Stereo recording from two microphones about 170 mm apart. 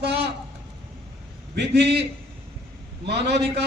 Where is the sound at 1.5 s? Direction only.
80° right.